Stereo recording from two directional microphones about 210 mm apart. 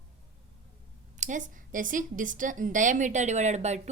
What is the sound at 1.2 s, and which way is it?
A woman's voice, 35° right (ahead or behind).